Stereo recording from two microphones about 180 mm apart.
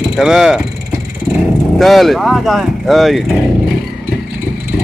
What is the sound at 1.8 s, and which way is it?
Speech, centre (ahead or behind).